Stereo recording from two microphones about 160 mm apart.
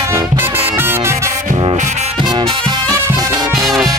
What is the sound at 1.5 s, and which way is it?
Music, 50° right (ahead or behind).